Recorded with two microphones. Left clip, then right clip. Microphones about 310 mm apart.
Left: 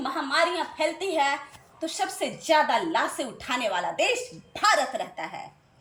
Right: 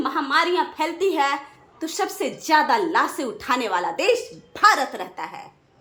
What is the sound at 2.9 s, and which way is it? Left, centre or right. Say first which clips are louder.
A woman's voice: right 5 dB; centre.